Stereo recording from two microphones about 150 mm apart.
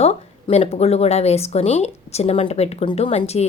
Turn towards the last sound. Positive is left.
turn(degrees=45)  # may be behind; listen again after turning